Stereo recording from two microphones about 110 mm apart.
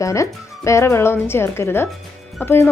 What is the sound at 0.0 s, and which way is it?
A woman's voice, 30° left (ahead or behind).